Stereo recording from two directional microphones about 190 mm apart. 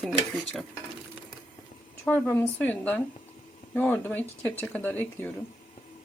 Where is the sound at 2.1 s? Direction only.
10° left (ahead or behind).